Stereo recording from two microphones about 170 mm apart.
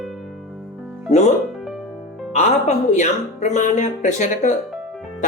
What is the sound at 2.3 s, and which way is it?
Speech, 40° left (ahead or behind).